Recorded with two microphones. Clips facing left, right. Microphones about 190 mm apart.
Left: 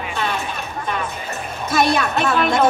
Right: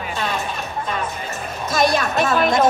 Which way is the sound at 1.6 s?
60° left (ahead or behind).